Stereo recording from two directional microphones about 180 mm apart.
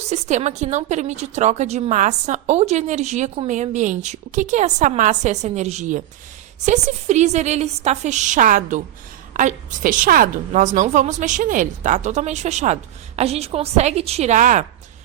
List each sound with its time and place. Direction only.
0.0 s a woman's voice: 40° right (ahead or behind)